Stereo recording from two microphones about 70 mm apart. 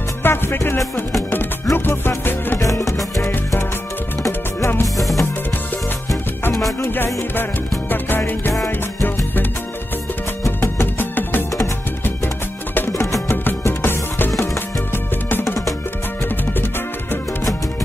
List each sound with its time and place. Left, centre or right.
0.2 s music: left
2.6 s music: left
3.2 s music: left
4.9 s music: centre
6.8 s music: left
12.7 s music: left
13.0 s music: left
13.4 s music: left